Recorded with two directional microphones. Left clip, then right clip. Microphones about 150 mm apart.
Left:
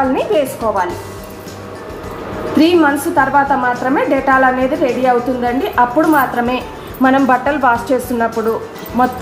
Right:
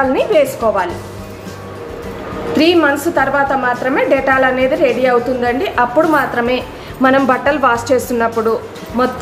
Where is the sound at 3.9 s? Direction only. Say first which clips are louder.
Even; 15° right (ahead or behind).